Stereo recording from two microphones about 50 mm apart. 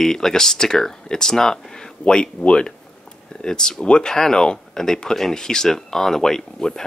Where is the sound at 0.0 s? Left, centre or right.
Centre.